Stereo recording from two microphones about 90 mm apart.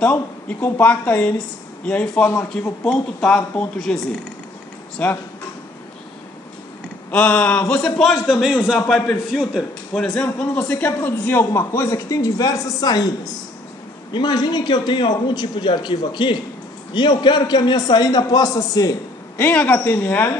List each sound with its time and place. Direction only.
0.0 s a man's voice: 15° left (ahead or behind)
5.0 s a man's voice: 15° left (ahead or behind)
7.1 s a man's voice: 15° left (ahead or behind); by 8.5 s 5° right (ahead or behind)
8.7 s a man's voice: 5° left (ahead or behind)
9.3 s speech: 5° right (ahead or behind)
9.9 s speech: 5° left (ahead or behind)
10.2 s a man's voice: 15° left (ahead or behind); by 18.9 s 40° left (ahead or behind)
19.5 s speech: 15° left (ahead or behind)